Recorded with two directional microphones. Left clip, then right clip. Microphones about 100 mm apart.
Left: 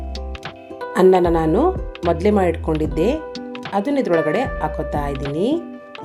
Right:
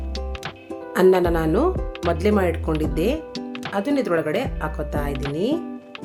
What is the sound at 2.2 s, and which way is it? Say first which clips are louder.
Speech: left 3 dB; 25° left (ahead or behind).